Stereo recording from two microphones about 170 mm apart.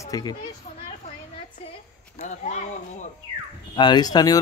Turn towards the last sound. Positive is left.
turn(degrees=20)  # may be behind; listen again after turning